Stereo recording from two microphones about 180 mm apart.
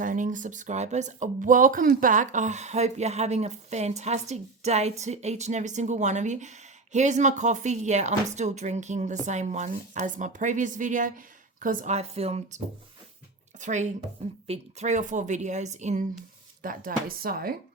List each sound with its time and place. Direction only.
0.0 s speech: 45° right (ahead or behind)
13.6 s speech: 40° right (ahead or behind)